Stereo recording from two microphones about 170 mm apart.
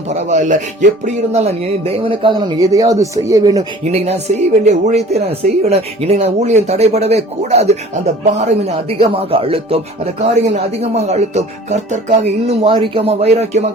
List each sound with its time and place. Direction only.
0.1 s speech: 40° right (ahead or behind); by 3.7 s 20° right (ahead or behind)
3.9 s speech: 40° right (ahead or behind)